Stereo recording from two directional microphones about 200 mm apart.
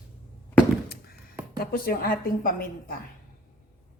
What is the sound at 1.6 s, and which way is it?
A woman's voice, 45° left (ahead or behind).